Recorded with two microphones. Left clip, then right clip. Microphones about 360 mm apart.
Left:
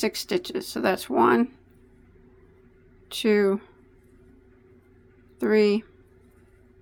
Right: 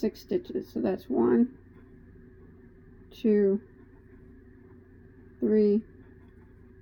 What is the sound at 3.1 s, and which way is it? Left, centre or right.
Speech, left.